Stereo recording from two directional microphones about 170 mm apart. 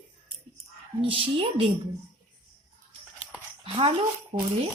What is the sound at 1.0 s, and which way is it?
Speech, 30° right (ahead or behind).